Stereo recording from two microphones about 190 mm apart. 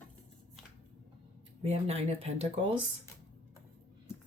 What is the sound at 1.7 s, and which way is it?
Speech, 35° right (ahead or behind).